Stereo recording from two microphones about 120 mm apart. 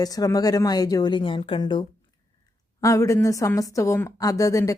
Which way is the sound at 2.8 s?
25° left (ahead or behind).